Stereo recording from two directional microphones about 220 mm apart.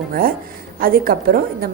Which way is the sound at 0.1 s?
40° right (ahead or behind).